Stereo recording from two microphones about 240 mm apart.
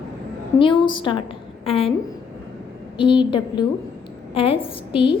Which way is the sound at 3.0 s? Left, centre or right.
Left.